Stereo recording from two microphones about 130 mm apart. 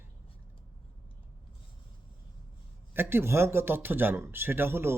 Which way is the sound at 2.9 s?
15° right (ahead or behind).